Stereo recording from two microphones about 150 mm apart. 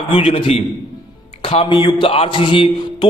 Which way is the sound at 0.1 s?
35° left (ahead or behind).